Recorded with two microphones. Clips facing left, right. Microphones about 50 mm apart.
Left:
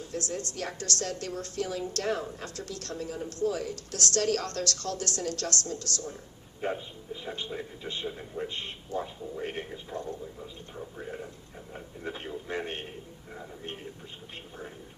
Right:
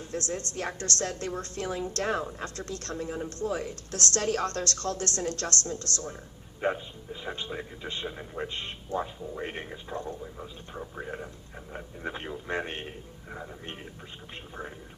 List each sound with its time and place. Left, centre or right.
0.0 s a woman's voice: right
6.6 s a man's voice: right
7.3 s a woman's voice: right
8.0 s speech: right
8.4 s a woman's voice: right